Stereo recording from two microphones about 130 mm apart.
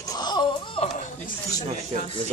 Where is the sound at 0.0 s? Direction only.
30° left (ahead or behind).